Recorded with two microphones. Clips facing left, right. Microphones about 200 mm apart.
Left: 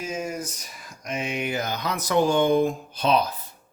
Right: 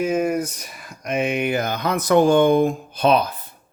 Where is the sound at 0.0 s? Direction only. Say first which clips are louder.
Right 10 dB; 60° right (ahead or behind).